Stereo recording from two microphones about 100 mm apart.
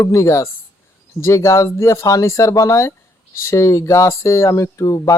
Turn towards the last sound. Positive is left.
turn(degrees=35)  # may be behind; listen again after turning